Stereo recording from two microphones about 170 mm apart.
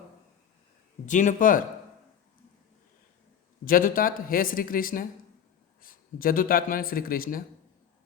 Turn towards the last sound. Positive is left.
turn(degrees=60)  # may be behind; listen again after turning